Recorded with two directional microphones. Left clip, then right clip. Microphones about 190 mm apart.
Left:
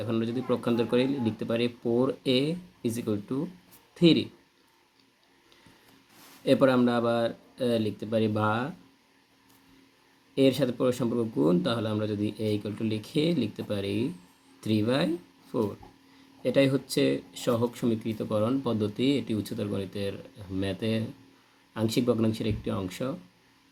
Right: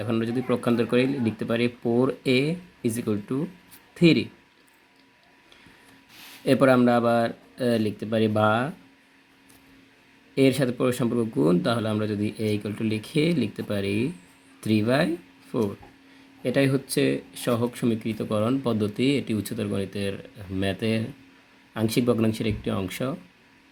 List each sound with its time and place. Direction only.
0.0 s a man's voice: 25° right (ahead or behind)
6.4 s a man's voice: 30° right (ahead or behind)
10.3 s a man's voice: 30° right (ahead or behind)
16.4 s a man's voice: 25° right (ahead or behind)